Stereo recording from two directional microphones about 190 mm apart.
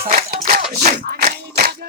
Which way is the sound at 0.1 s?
45° right (ahead or behind).